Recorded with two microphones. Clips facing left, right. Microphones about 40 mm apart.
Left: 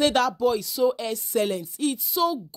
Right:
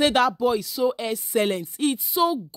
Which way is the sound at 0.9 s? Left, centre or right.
Right.